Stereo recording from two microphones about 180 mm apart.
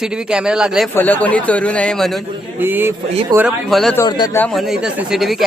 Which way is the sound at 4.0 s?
20° left (ahead or behind).